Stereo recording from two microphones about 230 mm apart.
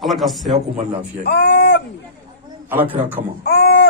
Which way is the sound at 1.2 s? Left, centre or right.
Left.